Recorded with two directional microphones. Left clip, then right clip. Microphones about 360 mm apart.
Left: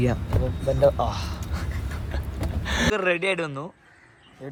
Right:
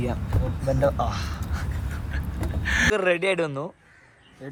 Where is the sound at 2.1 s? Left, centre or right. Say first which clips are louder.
Even; centre.